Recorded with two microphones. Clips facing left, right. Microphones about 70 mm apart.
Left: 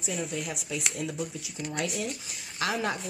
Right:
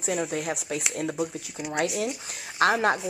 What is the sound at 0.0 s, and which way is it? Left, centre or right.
A woman's voice, right.